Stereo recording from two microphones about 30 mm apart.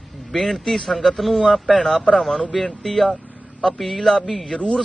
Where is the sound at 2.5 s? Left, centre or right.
Centre.